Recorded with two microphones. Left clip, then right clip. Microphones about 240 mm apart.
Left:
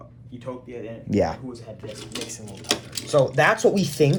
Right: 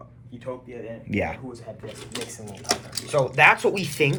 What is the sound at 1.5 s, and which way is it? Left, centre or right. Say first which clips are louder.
Coin: left 1 dB; centre.